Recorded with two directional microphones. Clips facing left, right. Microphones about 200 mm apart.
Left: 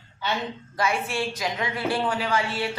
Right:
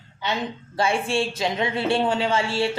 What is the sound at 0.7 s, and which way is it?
A woman's voice, 30° right (ahead or behind).